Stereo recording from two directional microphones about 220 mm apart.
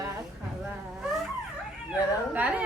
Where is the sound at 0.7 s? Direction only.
Centre (ahead or behind).